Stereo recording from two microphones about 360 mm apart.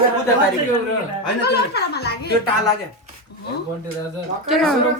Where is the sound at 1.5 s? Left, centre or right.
Left.